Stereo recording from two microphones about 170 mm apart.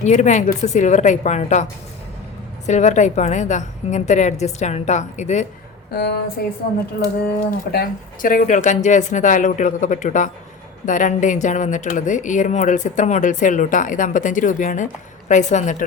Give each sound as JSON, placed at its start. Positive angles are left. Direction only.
{"t": 0.0, "sound": "speech", "side_deg": 45}
{"t": 2.6, "sound": "speech", "side_deg": 45}
{"t": 5.9, "sound": "speech", "side_deg": 70}
{"t": 7.7, "sound": "speech", "side_deg": 60}